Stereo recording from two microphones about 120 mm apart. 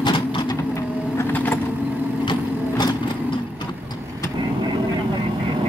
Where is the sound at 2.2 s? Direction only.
40° left (ahead or behind).